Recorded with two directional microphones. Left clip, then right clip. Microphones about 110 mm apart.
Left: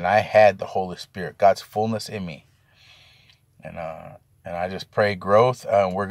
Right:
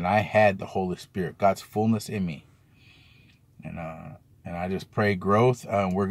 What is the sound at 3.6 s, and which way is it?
A man's voice, 20° left (ahead or behind).